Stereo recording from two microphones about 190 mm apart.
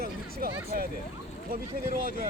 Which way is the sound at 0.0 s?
55° right (ahead or behind).